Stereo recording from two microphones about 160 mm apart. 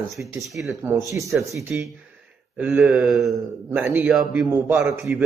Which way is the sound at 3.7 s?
15° right (ahead or behind).